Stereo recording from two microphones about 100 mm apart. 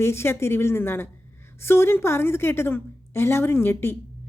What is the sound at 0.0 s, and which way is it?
A woman's voice, 25° left (ahead or behind).